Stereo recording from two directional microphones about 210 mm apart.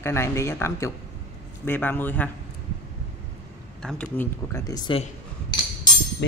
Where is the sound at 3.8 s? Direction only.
5° left (ahead or behind); by 5.0 s 20° left (ahead or behind).